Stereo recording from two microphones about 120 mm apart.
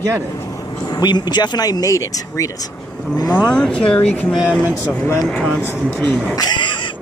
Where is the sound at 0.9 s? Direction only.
35° left (ahead or behind).